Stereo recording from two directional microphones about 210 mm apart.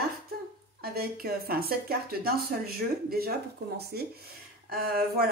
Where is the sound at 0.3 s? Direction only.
45° right (ahead or behind).